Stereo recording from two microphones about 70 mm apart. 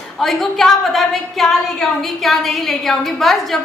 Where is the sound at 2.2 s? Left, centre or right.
Centre.